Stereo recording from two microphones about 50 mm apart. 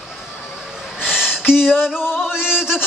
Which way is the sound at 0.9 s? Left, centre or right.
Centre.